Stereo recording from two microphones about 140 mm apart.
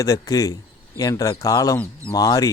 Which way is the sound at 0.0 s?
25° left (ahead or behind).